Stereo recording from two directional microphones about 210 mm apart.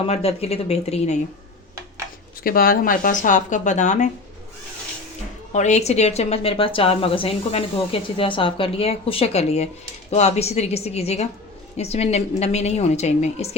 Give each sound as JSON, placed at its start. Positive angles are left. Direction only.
{"t": 0.1, "sound": "a woman's voice", "side_deg": 30}
{"t": 2.4, "sound": "speech", "side_deg": 45}
{"t": 5.5, "sound": "a woman's voice", "side_deg": 35}